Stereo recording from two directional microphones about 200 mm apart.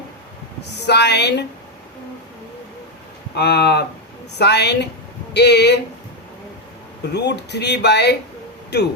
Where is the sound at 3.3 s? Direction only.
55° left (ahead or behind).